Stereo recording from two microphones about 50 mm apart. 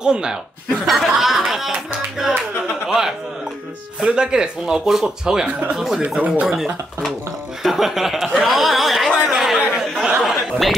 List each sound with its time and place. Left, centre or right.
0.0 s speech: centre
0.8 s a man's voice: centre
6.0 s speech: right
6.4 s speech: centre
9.2 s chatter: centre